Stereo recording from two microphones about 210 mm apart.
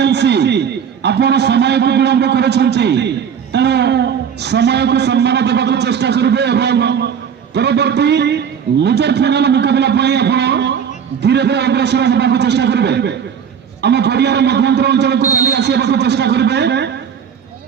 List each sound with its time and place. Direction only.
0.0 s a man's voice: 55° right (ahead or behind)